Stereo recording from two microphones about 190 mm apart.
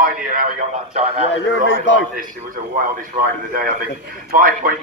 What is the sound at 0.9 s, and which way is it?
Speech, 35° right (ahead or behind).